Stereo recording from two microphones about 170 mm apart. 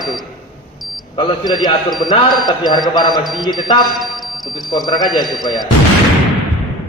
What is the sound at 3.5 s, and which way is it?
Speech, 25° left (ahead or behind).